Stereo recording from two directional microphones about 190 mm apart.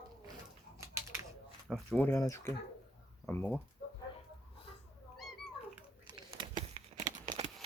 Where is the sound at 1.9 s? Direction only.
10° left (ahead or behind).